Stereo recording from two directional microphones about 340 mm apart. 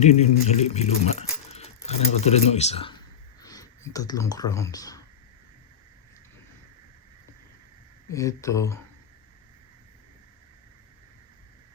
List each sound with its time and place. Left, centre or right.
0.0 s speech: centre
8.1 s speech: centre